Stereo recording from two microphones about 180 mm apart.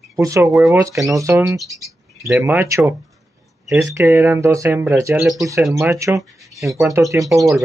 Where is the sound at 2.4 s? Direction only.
15° right (ahead or behind).